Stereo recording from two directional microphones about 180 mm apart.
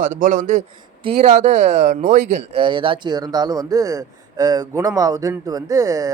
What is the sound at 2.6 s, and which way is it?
Speech, 30° right (ahead or behind).